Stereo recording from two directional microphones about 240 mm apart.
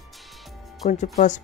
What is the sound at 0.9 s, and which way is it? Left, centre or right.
Speech, left.